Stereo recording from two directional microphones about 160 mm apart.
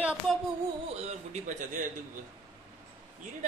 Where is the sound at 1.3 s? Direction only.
50° right (ahead or behind).